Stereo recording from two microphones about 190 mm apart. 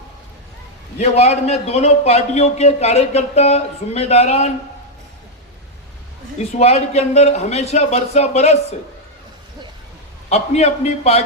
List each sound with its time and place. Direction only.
0.9 s a man's voice: 35° left (ahead or behind)
6.6 s a man's voice: 35° left (ahead or behind)
10.2 s a man's voice: 35° left (ahead or behind)